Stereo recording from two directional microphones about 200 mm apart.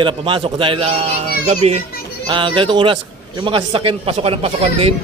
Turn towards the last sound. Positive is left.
turn(degrees=-30)  # may be behind; listen again after turning